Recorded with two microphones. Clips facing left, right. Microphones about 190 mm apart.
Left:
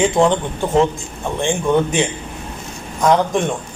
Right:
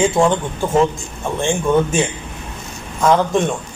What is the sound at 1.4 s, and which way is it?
Speech, 15° left (ahead or behind).